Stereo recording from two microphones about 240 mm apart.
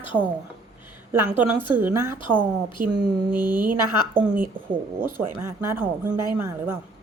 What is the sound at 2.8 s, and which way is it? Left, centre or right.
Speech, right.